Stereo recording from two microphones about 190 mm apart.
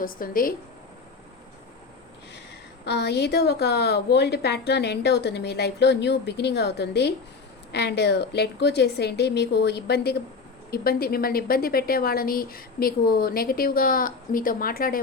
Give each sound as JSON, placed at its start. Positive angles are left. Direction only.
{"t": 0.0, "sound": "a woman's voice", "side_deg": 50}
{"t": 2.8, "sound": "a woman's voice", "side_deg": 60}